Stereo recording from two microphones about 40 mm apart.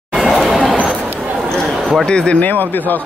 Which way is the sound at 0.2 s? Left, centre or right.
Centre.